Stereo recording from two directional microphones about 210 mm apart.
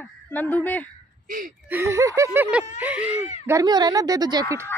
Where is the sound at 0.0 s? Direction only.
10° left (ahead or behind).